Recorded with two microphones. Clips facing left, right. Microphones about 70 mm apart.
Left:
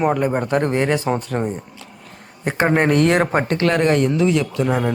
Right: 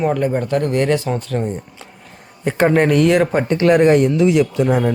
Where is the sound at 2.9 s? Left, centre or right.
Left.